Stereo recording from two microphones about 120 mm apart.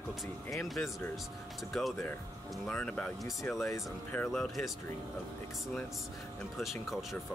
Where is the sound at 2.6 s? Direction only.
10° left (ahead or behind).